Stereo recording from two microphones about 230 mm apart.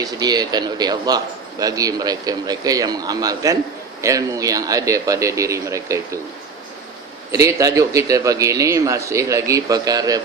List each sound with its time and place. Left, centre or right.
0.0 s a man's voice: centre
7.3 s a man's voice: centre